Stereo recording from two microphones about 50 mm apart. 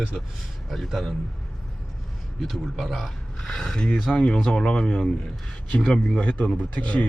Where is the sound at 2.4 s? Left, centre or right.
Centre.